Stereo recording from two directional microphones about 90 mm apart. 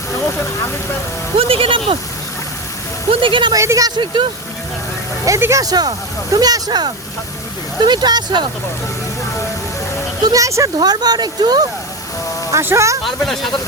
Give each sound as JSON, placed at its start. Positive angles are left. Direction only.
{"t": 1.4, "sound": "speech", "side_deg": -90}
{"t": 3.1, "sound": "speech", "side_deg": -75}
{"t": 3.5, "sound": "speech", "side_deg": -35}
{"t": 3.9, "sound": "speech", "side_deg": -60}
{"t": 5.4, "sound": "speech", "side_deg": -35}
{"t": 10.2, "sound": "speech", "side_deg": -40}
{"t": 10.8, "sound": "speech", "side_deg": -50}
{"t": 12.5, "sound": "speech", "side_deg": -30}
{"t": 13.1, "sound": "speech", "side_deg": 5}